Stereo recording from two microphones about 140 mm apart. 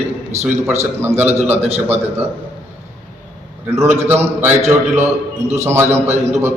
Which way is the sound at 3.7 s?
20° right (ahead or behind).